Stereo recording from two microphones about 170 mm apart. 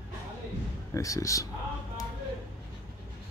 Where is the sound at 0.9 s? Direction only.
20° left (ahead or behind).